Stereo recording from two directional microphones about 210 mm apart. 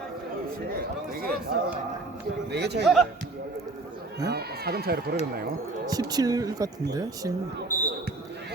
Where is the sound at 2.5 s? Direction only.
50° right (ahead or behind).